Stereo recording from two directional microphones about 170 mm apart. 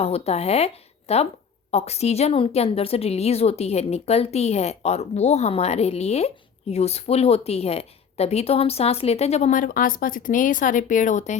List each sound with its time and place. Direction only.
0.0 s a woman's voice: 40° left (ahead or behind)